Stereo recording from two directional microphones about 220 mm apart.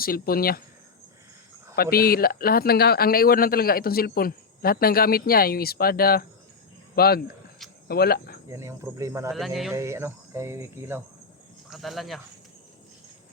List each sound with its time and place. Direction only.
0.0 s speech: 40° left (ahead or behind)
1.7 s speech: 45° left (ahead or behind)
8.4 s speech: 15° right (ahead or behind)
9.3 s speech: centre (ahead or behind)
9.7 s speech: 15° right (ahead or behind)
11.7 s speech: centre (ahead or behind)